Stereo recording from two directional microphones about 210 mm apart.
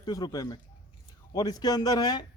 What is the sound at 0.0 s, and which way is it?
A man's voice, 20° left (ahead or behind).